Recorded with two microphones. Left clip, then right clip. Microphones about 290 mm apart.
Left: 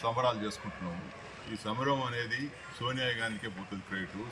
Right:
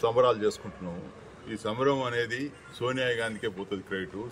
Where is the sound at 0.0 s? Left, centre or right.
Centre.